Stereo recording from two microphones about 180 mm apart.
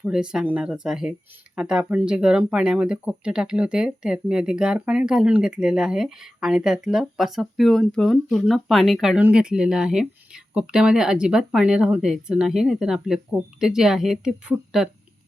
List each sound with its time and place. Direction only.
0.0 s speech: 5° right (ahead or behind)